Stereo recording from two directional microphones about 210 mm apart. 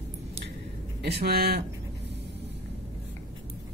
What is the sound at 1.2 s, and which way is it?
Speech, 50° right (ahead or behind).